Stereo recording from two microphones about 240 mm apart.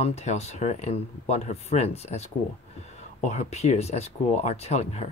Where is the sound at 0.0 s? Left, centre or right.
Left.